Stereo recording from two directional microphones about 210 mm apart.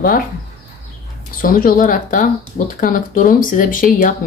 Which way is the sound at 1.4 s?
40° left (ahead or behind).